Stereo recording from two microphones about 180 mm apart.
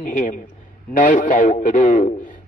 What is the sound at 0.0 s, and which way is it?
A man's voice, 45° left (ahead or behind).